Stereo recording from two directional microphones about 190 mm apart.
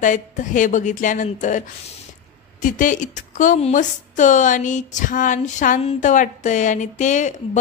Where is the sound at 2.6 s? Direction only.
45° left (ahead or behind).